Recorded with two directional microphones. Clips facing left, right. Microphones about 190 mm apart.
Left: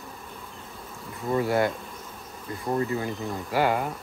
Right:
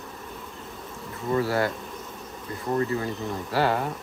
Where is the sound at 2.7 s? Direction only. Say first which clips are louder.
Right 1 dB; 15° left (ahead or behind).